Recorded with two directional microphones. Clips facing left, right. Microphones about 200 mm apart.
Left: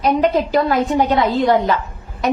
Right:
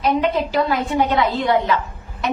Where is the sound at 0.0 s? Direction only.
40° left (ahead or behind).